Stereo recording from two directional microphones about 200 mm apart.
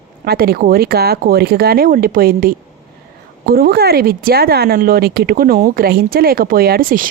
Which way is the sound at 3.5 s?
50° right (ahead or behind).